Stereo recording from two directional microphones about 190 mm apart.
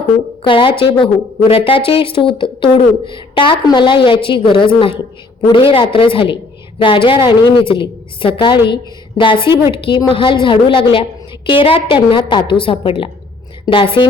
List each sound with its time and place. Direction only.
0.4 s a woman's voice: 25° left (ahead or behind)